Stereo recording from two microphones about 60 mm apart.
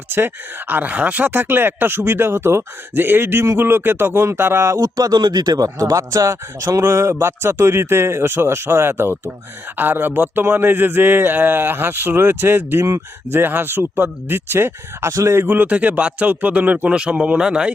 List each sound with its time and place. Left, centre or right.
0.7 s speech: right
4.6 s speech: right
6.8 s speech: right
15.1 s speech: right
15.4 s speech: right; by 17.7 s centre